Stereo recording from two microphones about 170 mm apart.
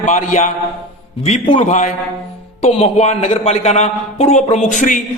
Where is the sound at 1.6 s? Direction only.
45° left (ahead or behind).